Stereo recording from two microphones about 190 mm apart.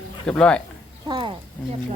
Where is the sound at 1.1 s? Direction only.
25° right (ahead or behind).